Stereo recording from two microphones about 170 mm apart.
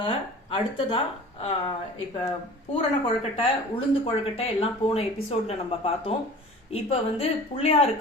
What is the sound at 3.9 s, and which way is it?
A woman's voice, 35° left (ahead or behind).